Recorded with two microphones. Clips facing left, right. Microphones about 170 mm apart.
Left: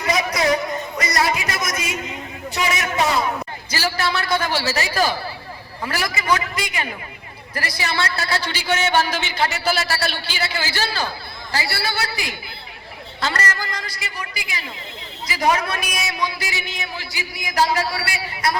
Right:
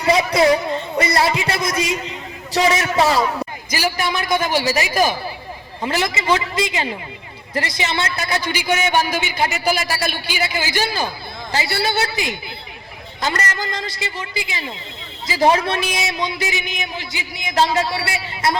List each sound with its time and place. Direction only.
0.0 s a man's voice: 30° right (ahead or behind)
3.7 s a man's voice: 15° right (ahead or behind)